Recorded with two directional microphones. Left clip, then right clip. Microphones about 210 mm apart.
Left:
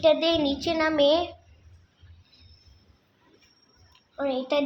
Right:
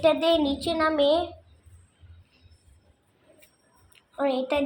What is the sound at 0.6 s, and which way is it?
Speech, 10° left (ahead or behind).